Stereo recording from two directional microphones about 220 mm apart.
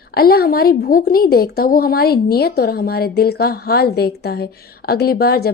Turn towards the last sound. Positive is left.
turn(degrees=45)  # may be behind; listen again after turning